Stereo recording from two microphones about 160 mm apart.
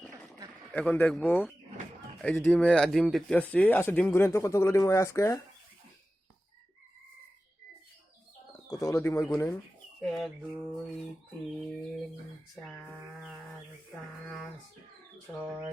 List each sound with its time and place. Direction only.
0.7 s a man's voice: 10° left (ahead or behind)
8.6 s speech: 20° left (ahead or behind)
10.0 s mantra: centre (ahead or behind)
12.6 s mantra: centre (ahead or behind)
15.4 s speech: 5° right (ahead or behind)